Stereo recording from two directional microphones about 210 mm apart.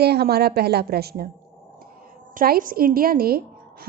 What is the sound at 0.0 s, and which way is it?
A woman's voice, 50° right (ahead or behind).